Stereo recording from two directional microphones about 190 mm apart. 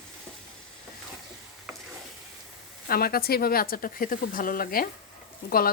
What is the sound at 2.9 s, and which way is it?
Speech, 50° left (ahead or behind).